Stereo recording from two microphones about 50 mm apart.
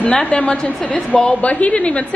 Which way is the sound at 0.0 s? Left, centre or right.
Centre.